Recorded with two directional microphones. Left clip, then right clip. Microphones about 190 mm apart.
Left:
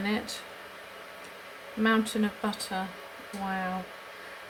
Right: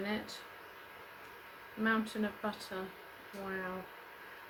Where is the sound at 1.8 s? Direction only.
40° left (ahead or behind).